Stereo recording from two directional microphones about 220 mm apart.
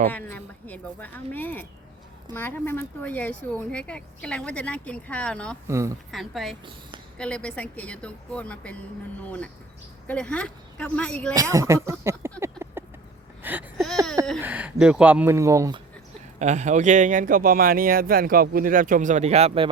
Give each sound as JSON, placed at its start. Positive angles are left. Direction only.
{"t": 0.1, "sound": "speech", "side_deg": 10}
{"t": 5.6, "sound": "speech", "side_deg": -15}
{"t": 6.1, "sound": "speech", "side_deg": 0}
{"t": 11.3, "sound": "speech", "side_deg": -15}
{"t": 12.4, "sound": "a sound", "side_deg": -10}
{"t": 14.3, "sound": "speech", "side_deg": -5}
{"t": 16.4, "sound": "speech", "side_deg": -30}